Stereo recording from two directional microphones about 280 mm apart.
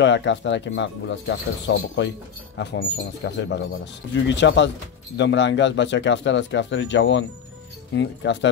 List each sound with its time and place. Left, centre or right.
0.0 s speech: left